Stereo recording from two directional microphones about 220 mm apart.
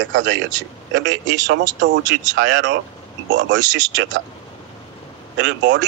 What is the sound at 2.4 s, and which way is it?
Speech, 55° right (ahead or behind).